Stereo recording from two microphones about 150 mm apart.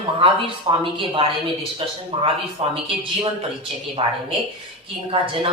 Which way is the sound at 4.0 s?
40° right (ahead or behind).